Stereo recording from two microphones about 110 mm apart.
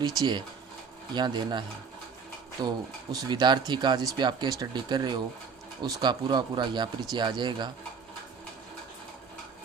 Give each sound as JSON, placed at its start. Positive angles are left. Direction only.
{"t": 0.2, "sound": "speech", "side_deg": -40}